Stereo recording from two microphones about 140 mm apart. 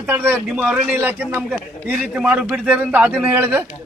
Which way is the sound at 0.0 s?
10° right (ahead or behind).